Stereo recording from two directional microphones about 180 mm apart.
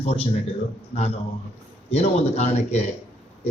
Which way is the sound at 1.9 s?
35° left (ahead or behind).